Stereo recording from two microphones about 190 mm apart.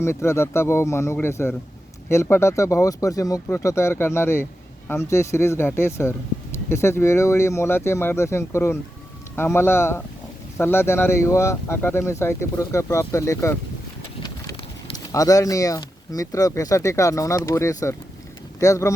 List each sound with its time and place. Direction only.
0.0 s speech: 15° left (ahead or behind)
14.2 s vehicle: 20° left (ahead or behind)
14.9 s speech: 20° left (ahead or behind)